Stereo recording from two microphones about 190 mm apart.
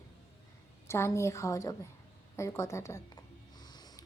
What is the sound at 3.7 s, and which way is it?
Snort, 20° left (ahead or behind).